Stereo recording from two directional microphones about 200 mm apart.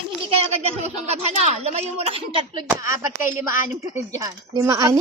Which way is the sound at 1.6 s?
30° right (ahead or behind).